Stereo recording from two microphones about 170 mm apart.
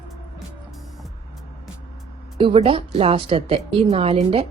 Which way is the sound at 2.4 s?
30° right (ahead or behind).